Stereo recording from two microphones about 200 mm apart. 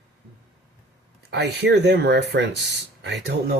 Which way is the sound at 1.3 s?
55° right (ahead or behind).